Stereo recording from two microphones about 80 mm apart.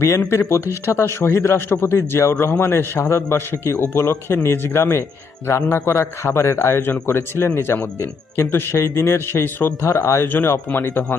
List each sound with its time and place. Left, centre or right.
0.2 s a man's voice: left
10.2 s speech: left